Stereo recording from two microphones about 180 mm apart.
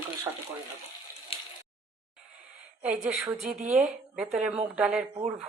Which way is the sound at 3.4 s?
45° right (ahead or behind).